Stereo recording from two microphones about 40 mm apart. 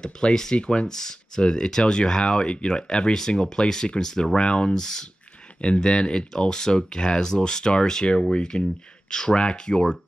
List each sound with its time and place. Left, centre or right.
0.0 s speech: centre
5.6 s speech: left